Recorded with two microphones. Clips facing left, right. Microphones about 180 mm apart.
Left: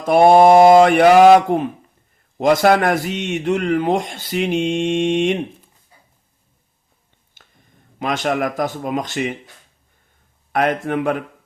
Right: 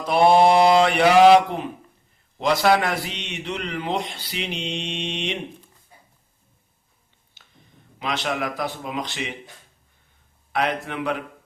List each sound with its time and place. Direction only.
0.0 s a man's voice: 50° left (ahead or behind)
7.4 s a sound: 50° left (ahead or behind)
7.9 s a man's voice: 45° left (ahead or behind)
10.5 s a man's voice: 45° left (ahead or behind)